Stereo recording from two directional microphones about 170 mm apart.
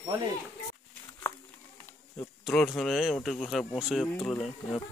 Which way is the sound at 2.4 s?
Centre (ahead or behind).